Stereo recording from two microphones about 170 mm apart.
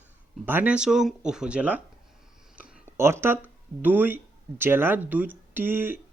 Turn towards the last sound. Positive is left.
turn(degrees=-10)  # may be behind; listen again after turning